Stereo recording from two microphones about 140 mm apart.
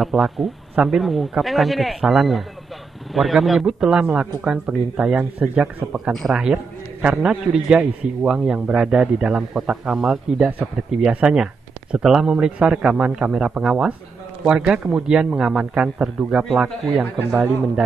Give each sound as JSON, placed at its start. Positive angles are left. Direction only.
{"t": 0.0, "sound": "a man's voice", "side_deg": 0}